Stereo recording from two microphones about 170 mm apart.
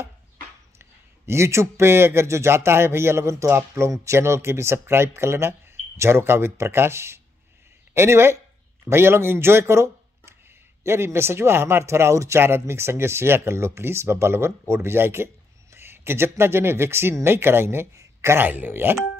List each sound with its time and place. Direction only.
0.7 s speech: 15° right (ahead or behind)